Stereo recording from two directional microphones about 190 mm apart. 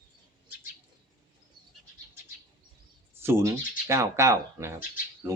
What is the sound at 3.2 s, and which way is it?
Speech, 15° right (ahead or behind).